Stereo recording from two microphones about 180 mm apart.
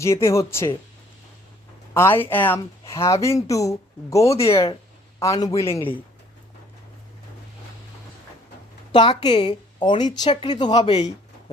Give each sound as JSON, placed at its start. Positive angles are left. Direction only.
{"t": 0.0, "sound": "speech", "side_deg": 15}
{"t": 1.9, "sound": "speech", "side_deg": 10}
{"t": 4.3, "sound": "speech", "side_deg": 35}
{"t": 5.2, "sound": "a man's voice", "side_deg": 20}
{"t": 8.9, "sound": "a woman's voice", "side_deg": 25}